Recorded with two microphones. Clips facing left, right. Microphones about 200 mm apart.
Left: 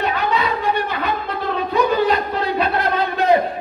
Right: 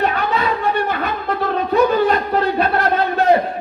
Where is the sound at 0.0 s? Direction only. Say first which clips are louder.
Right 1 dB; 50° right (ahead or behind).